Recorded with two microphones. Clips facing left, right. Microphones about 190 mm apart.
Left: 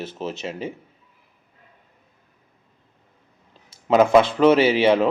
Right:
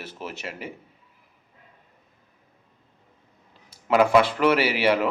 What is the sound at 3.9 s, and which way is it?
Speech, 20° left (ahead or behind).